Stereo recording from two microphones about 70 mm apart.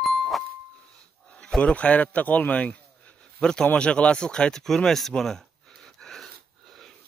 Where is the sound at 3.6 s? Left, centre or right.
Centre.